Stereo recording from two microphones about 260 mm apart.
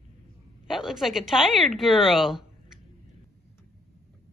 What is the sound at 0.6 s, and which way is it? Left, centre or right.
Speech, centre.